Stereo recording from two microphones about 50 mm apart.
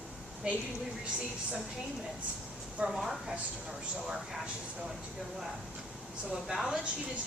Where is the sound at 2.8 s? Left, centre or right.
Centre.